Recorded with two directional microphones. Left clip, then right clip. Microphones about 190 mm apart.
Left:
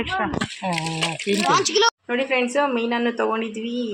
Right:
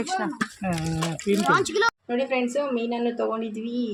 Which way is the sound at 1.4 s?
45° right (ahead or behind).